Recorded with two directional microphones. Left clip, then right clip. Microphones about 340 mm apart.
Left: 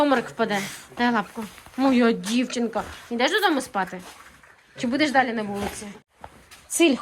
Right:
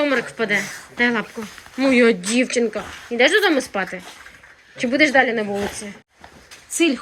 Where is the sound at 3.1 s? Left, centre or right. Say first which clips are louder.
Right 6 dB; centre.